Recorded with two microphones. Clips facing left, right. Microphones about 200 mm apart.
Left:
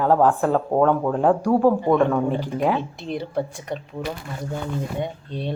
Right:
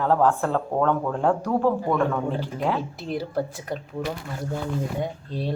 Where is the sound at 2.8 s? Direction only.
Centre (ahead or behind).